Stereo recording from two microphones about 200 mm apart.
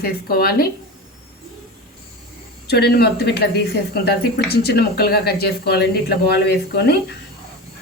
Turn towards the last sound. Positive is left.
turn(degrees=55)  # may be behind; listen again after turning